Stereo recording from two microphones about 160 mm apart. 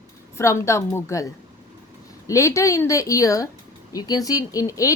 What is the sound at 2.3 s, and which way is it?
Speech, 20° left (ahead or behind).